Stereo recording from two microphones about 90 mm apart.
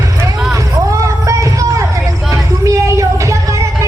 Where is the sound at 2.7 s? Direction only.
35° right (ahead or behind).